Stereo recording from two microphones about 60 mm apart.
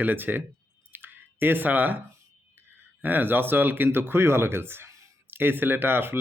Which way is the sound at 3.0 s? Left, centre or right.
Right.